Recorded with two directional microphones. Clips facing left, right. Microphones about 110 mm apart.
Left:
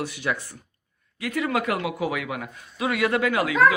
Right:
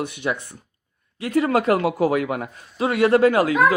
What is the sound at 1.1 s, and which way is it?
A woman's voice, 30° right (ahead or behind).